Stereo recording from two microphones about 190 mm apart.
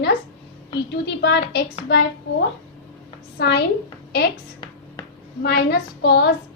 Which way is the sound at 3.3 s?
60° left (ahead or behind).